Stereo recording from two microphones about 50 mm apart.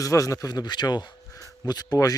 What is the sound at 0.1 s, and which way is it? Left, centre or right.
Speech, left.